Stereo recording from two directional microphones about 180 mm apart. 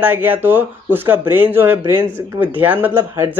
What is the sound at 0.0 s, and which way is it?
Speech, 10° right (ahead or behind).